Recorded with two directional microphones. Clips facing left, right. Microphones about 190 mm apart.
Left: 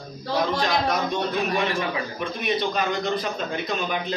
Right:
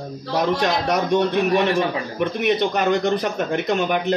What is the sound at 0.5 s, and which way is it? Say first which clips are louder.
Speech: right 3 dB; 75° right (ahead or behind).